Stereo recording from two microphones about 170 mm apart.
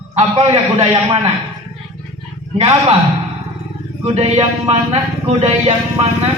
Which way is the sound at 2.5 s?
40° right (ahead or behind).